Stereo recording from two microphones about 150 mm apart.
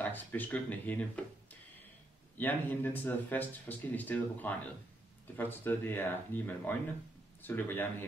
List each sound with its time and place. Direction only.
0.0 s speech: 10° left (ahead or behind)
2.3 s speech: 10° left (ahead or behind)